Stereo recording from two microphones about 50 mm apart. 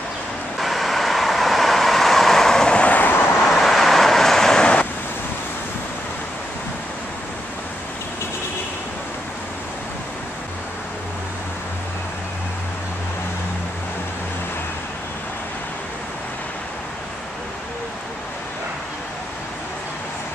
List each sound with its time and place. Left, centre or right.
0.6 s vehicle: centre
2.8 s vehicle: left
3.4 s vehicle: centre